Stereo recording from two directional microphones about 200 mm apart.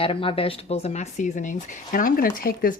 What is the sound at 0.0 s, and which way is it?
Speech, 25° left (ahead or behind).